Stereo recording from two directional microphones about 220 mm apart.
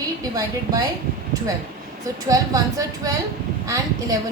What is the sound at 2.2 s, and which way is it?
Speech, 15° right (ahead or behind).